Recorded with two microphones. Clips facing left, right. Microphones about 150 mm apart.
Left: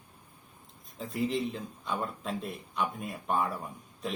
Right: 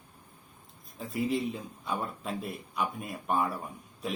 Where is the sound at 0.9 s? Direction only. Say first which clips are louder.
Right 1 dB; centre (ahead or behind).